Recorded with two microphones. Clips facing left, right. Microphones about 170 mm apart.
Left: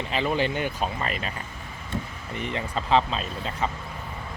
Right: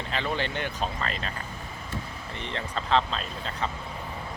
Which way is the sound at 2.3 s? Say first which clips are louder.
Left 4 dB; 10° left (ahead or behind).